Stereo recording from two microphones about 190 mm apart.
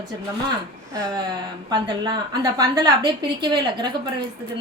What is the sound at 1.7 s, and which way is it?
A woman's voice, 20° right (ahead or behind).